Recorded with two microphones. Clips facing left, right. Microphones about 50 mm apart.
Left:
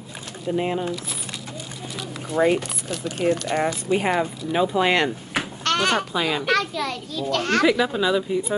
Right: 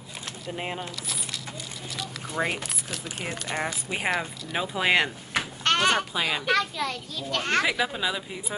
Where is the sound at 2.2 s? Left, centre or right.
Centre.